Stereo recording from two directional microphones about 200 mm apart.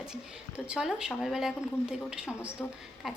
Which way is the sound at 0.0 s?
5° right (ahead or behind).